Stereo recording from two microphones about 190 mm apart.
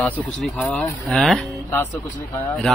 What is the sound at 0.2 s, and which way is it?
Speech, 10° left (ahead or behind).